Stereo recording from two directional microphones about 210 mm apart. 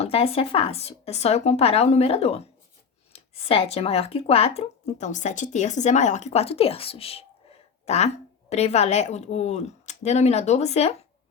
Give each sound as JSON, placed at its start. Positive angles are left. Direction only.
{"t": 0.0, "sound": "speech", "side_deg": 25}